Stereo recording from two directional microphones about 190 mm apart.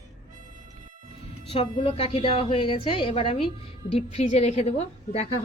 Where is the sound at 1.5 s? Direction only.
30° left (ahead or behind).